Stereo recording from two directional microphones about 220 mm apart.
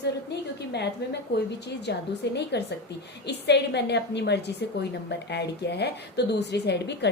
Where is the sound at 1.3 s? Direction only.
50° left (ahead or behind).